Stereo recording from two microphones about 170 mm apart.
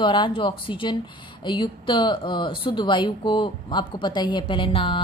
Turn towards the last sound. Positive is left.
turn(degrees=30)  # may be behind; listen again after turning